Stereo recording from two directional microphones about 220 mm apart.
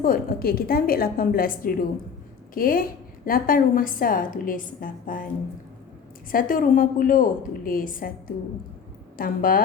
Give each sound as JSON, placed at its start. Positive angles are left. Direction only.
{"t": 0.0, "sound": "a woman's voice", "side_deg": 40}
{"t": 6.3, "sound": "a woman's voice", "side_deg": 40}
{"t": 9.1, "sound": "a woman's voice", "side_deg": 40}